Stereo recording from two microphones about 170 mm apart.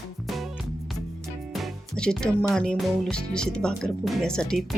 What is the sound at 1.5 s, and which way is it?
Speech, centre (ahead or behind).